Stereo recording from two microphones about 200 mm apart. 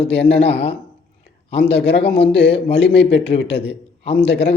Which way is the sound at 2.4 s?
30° left (ahead or behind).